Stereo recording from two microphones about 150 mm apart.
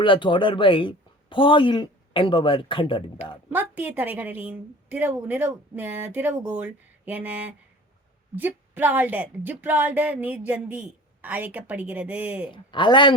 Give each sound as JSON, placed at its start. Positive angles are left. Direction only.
{"t": 0.0, "sound": "speech", "side_deg": 35}
{"t": 3.5, "sound": "a woman's voice", "side_deg": -10}
{"t": 12.5, "sound": "a man's voice", "side_deg": 30}